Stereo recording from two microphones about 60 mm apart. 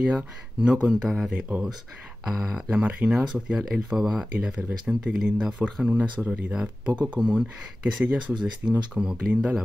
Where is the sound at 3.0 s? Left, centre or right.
Centre.